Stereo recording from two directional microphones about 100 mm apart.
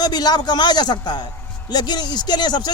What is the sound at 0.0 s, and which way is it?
A man's voice, 45° left (ahead or behind).